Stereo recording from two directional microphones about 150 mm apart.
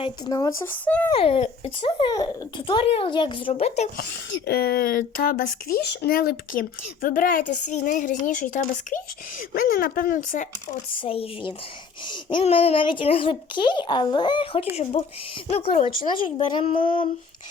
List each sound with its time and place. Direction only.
0.3 s speech: 20° left (ahead or behind)
0.9 s a child's voice: 10° left (ahead or behind)
1.1 s speech: 40° left (ahead or behind)
4.4 s speech: 90° left; by 9.0 s 60° left (ahead or behind)
9.6 s speech: 80° left; by 10.8 s 60° left (ahead or behind)
11.0 s speech: 35° left (ahead or behind)
14.9 s speech: 50° left (ahead or behind)